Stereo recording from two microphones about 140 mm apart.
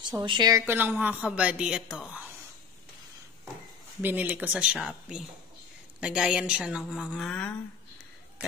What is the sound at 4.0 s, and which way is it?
A woman's voice, 15° right (ahead or behind).